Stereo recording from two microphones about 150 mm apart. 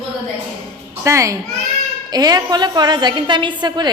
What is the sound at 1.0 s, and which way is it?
A woman's voice, 20° right (ahead or behind).